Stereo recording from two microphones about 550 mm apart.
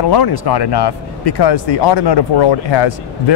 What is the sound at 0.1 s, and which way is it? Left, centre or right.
Speech, left.